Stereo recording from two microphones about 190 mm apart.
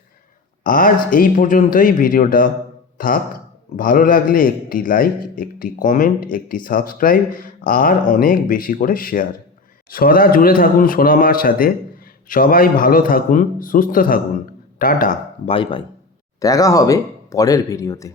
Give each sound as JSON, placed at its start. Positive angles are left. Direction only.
{"t": 0.6, "sound": "a man's voice", "side_deg": 45}
{"t": 15.4, "sound": "speech", "side_deg": 25}